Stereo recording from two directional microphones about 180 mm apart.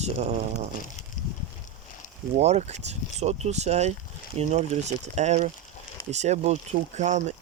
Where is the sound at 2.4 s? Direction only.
35° right (ahead or behind).